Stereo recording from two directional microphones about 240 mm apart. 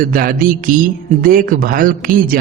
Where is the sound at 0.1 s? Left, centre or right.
Right.